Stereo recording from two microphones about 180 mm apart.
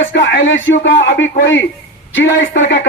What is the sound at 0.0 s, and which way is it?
A man's voice, 85° left.